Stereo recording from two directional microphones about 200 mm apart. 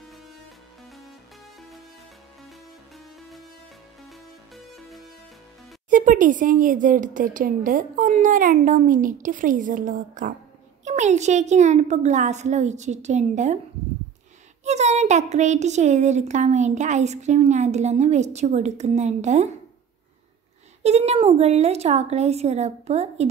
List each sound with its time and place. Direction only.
4.6 s music: centre (ahead or behind)
5.9 s a child's voice: 40° right (ahead or behind)
14.6 s a child's voice: 35° right (ahead or behind)
20.8 s a child's voice: 30° right (ahead or behind)